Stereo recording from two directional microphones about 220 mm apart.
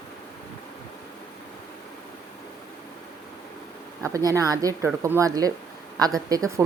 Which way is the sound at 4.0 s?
15° right (ahead or behind).